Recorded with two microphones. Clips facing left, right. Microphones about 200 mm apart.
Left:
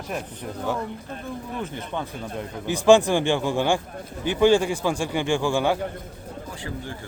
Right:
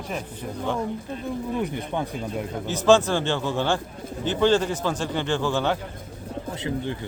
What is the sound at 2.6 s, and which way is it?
A man's voice, 15° left (ahead or behind).